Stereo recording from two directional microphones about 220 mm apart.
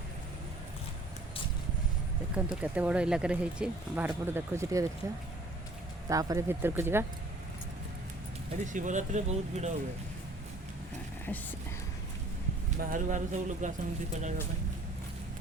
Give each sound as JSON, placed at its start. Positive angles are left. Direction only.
{"t": 2.3, "sound": "speech", "side_deg": -5}
{"t": 6.1, "sound": "speech", "side_deg": -15}
{"t": 8.6, "sound": "speech", "side_deg": -35}
{"t": 11.3, "sound": "speech", "side_deg": 10}
{"t": 12.8, "sound": "speech", "side_deg": -35}